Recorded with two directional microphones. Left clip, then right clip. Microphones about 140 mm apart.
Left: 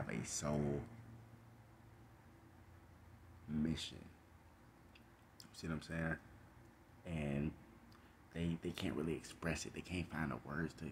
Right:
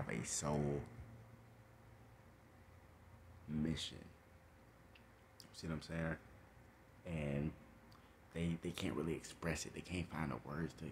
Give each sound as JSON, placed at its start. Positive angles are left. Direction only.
{"t": 0.0, "sound": "speech", "side_deg": -15}
{"t": 3.5, "sound": "speech", "side_deg": -15}
{"t": 5.4, "sound": "speech", "side_deg": -5}
{"t": 8.3, "sound": "speech", "side_deg": -20}